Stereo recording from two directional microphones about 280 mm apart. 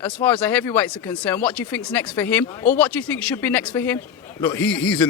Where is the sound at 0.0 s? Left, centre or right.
Centre.